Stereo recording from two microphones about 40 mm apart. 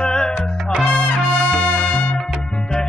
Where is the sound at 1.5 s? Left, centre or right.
Left.